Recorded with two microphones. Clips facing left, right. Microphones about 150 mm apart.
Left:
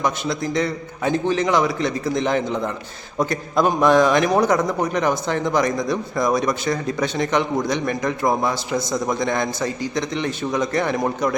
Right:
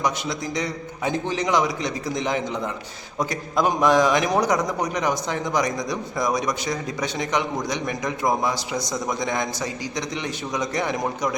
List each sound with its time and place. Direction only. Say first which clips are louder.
0.4 s a man's voice: left 5 dB; 15° right (ahead or behind)